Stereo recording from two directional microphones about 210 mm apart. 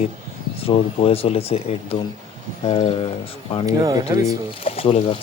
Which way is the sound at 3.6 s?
15° right (ahead or behind).